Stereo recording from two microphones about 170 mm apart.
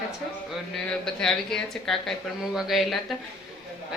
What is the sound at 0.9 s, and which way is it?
A woman's voice, 5° left (ahead or behind).